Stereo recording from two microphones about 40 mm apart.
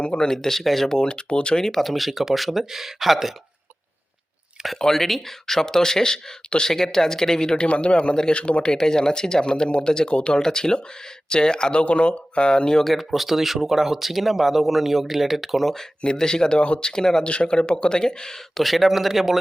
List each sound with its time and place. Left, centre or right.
0.0 s speech: left
0.3 s speech: centre
0.9 s speech: centre
1.6 s speech: centre
4.8 s speech: centre; by 8.1 s left
8.1 s speech: centre
8.4 s speech: left
12.8 s speech: centre
16.1 s speech: centre
17.2 s speech: left
18.6 s speech: centre